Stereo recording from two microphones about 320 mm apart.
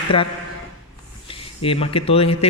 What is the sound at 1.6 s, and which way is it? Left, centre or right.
Speech, centre.